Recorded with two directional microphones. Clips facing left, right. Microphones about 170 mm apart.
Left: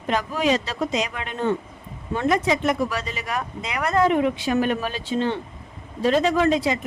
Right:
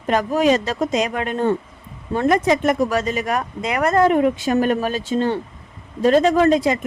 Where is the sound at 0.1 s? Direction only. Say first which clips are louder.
Right 5 dB; 45° right (ahead or behind).